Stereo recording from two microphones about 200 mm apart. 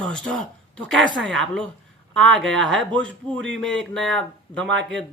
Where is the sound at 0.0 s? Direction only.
5° left (ahead or behind).